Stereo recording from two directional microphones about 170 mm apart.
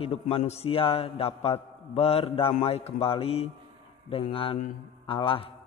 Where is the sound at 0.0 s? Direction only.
35° left (ahead or behind).